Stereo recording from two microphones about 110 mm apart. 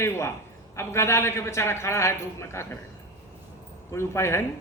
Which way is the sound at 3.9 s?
25° left (ahead or behind).